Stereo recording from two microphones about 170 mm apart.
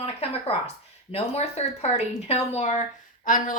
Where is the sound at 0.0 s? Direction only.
35° left (ahead or behind).